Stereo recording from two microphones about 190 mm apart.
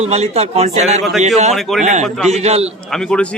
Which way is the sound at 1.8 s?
40° right (ahead or behind).